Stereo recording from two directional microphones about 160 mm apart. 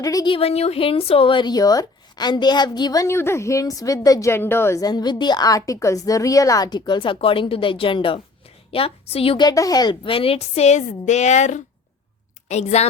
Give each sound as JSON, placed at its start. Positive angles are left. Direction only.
{"t": 0.0, "sound": "speech", "side_deg": 20}
{"t": 0.3, "sound": "a woman's voice", "side_deg": 40}